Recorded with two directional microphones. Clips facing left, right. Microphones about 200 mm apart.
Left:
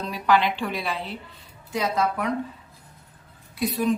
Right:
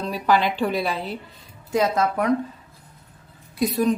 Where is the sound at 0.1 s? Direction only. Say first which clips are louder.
Right 1 dB; 40° right (ahead or behind).